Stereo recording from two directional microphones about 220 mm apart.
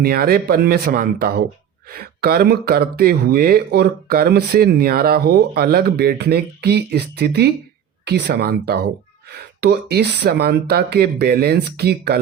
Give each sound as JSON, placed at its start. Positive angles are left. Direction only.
{"t": 0.0, "sound": "speech", "side_deg": -45}